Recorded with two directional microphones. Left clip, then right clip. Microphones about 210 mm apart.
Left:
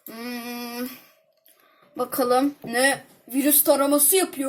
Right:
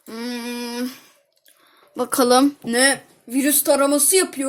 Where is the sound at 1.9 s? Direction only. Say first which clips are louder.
Right 5 dB; 25° right (ahead or behind).